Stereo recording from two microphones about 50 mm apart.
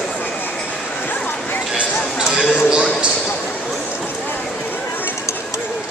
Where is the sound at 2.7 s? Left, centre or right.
Right.